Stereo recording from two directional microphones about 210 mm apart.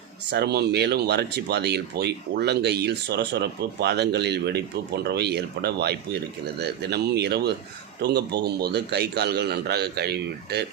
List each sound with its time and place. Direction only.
0.3 s speech: 55° right (ahead or behind)